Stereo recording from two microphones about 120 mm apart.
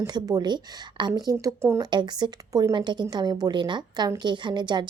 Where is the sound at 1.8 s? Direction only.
40° right (ahead or behind).